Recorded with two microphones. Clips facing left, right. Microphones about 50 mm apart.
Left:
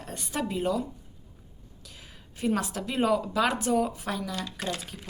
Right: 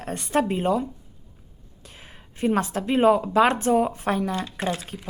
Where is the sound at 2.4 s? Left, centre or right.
Right.